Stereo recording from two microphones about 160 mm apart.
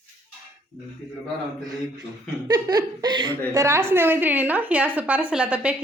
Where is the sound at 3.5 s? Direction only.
15° right (ahead or behind).